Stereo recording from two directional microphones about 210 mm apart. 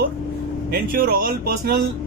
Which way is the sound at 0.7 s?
45° right (ahead or behind).